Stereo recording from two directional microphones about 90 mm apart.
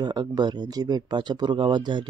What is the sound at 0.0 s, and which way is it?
Speech, 45° right (ahead or behind).